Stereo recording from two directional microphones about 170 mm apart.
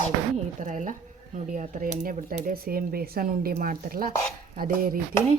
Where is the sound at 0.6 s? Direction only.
50° right (ahead or behind).